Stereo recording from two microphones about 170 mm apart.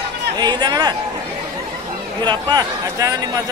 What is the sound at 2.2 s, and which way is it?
Speech, 20° right (ahead or behind).